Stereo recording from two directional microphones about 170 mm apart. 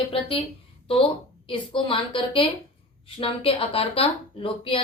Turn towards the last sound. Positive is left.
turn(degrees=30)  # may be behind; listen again after turning